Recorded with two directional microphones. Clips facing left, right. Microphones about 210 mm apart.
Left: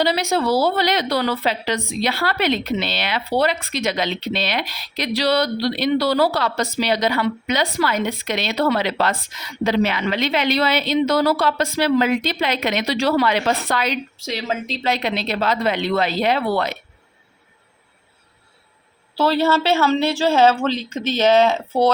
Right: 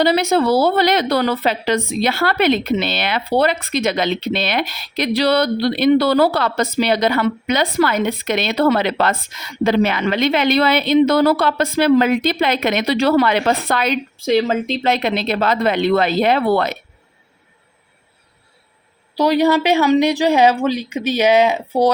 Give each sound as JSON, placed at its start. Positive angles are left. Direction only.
{"t": 0.0, "sound": "a woman's voice", "side_deg": -55}
{"t": 19.1, "sound": "speech", "side_deg": -15}